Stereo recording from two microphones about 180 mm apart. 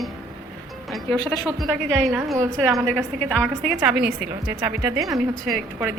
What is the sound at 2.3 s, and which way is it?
A woman's voice, 15° right (ahead or behind).